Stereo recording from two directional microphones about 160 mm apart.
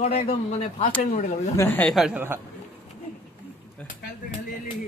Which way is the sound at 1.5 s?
15° left (ahead or behind).